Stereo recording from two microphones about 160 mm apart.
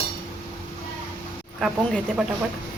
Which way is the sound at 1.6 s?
Centre (ahead or behind).